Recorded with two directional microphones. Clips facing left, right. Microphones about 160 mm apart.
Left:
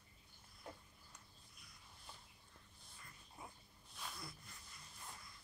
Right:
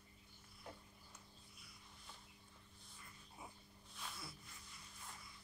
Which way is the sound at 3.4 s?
5° right (ahead or behind).